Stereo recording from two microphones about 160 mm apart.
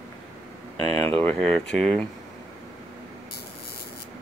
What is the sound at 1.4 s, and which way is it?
Speech, 5° left (ahead or behind).